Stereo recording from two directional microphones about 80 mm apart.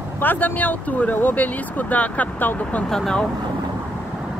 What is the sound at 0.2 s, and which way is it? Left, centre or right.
Speech, left.